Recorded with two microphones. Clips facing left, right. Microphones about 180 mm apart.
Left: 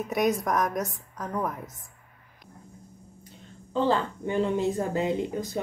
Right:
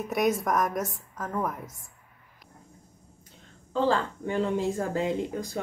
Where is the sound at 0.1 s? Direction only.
Centre (ahead or behind).